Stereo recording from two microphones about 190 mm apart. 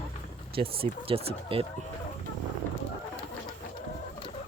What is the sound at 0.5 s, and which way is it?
Speech, 30° right (ahead or behind).